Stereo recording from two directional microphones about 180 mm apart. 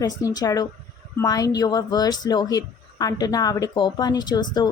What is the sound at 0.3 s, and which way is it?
Speech, 20° left (ahead or behind).